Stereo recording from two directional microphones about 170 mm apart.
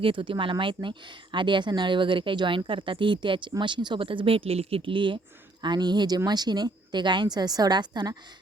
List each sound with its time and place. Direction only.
0.0 s speech: 30° right (ahead or behind)